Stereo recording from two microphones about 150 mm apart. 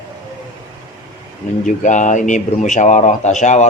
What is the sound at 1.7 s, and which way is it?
Speech, 55° left (ahead or behind).